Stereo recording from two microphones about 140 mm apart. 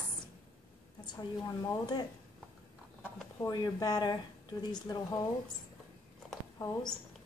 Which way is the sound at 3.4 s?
30° left (ahead or behind).